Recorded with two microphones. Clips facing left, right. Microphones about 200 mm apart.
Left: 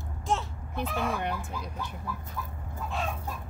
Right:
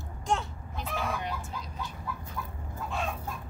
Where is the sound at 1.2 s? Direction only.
55° left (ahead or behind).